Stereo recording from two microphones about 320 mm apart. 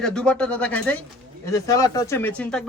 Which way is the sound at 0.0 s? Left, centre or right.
Centre.